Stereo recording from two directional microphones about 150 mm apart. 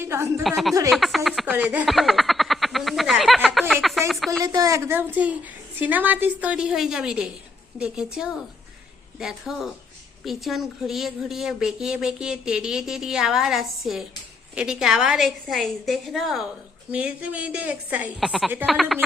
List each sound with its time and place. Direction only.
0.0 s a woman's voice: 15° right (ahead or behind)
0.4 s speech: centre (ahead or behind)
1.5 s a woman's voice: 10° right (ahead or behind)
1.9 s a sound: centre (ahead or behind)
4.4 s a sound: 25° right (ahead or behind)
5.8 s a woman's voice: 10° right (ahead or behind)